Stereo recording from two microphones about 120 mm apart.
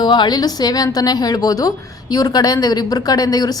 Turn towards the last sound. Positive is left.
turn(degrees=35)  # may be behind; listen again after turning